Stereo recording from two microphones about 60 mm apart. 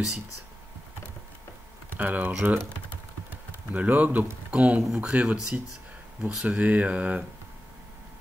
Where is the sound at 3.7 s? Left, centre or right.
Right.